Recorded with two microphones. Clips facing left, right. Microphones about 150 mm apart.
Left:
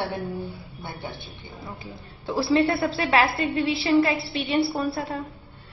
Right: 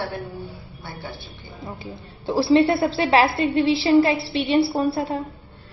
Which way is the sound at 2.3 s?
20° right (ahead or behind).